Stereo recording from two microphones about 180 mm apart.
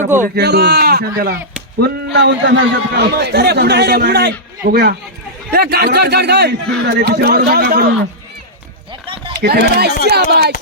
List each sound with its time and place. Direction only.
0.3 s a man's voice: 65° right (ahead or behind)
9.0 s a sound: 30° right (ahead or behind)
9.4 s speech: 60° right (ahead or behind)